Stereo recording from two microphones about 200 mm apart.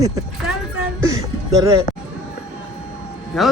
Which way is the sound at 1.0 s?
15° right (ahead or behind).